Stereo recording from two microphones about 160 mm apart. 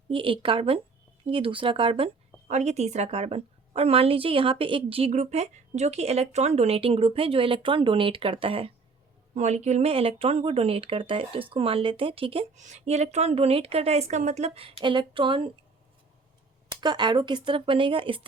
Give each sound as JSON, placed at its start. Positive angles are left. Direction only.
{"t": 0.1, "sound": "a woman's voice", "side_deg": -35}
{"t": 2.5, "sound": "a woman's voice", "side_deg": -45}
{"t": 12.5, "sound": "a woman's voice", "side_deg": -50}
{"t": 16.8, "sound": "a woman's voice", "side_deg": -30}